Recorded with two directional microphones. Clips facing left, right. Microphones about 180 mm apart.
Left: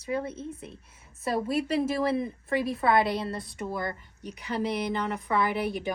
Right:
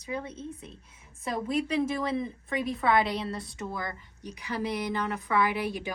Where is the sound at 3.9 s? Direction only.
25° left (ahead or behind).